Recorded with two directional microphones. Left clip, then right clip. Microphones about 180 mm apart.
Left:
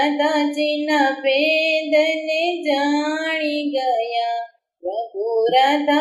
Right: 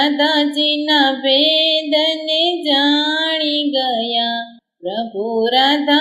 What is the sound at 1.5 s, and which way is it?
Music, centre (ahead or behind).